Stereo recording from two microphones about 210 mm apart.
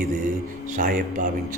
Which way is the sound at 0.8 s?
40° right (ahead or behind).